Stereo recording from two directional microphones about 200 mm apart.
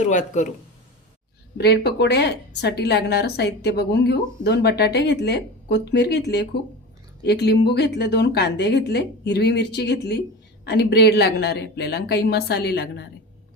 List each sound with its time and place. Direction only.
0.0 s speech: 40° left (ahead or behind)
1.5 s a woman's voice: 55° left (ahead or behind)